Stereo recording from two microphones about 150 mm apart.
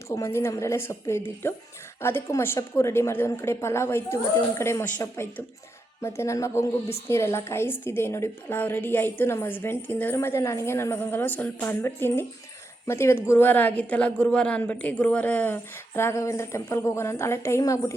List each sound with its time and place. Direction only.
0.1 s a woman's voice: 20° left (ahead or behind)